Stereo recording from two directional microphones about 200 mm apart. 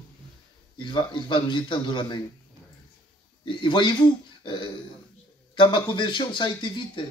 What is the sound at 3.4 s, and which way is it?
Speech, 25° left (ahead or behind).